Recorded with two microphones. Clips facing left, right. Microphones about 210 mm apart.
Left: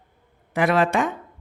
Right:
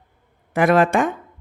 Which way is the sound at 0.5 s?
50° right (ahead or behind).